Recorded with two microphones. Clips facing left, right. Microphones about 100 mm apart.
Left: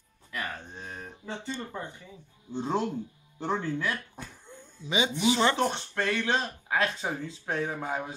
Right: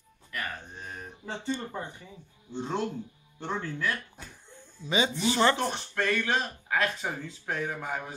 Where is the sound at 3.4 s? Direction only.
15° left (ahead or behind).